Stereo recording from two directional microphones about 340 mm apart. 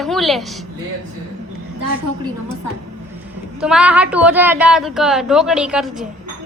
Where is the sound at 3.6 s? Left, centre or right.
Centre.